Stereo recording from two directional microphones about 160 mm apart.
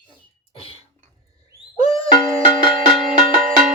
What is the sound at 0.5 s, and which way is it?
Cough, 40° left (ahead or behind).